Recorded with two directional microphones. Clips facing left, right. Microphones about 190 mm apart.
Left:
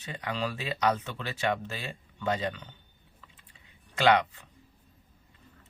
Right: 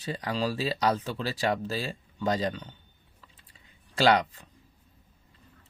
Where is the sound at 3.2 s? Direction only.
35° right (ahead or behind).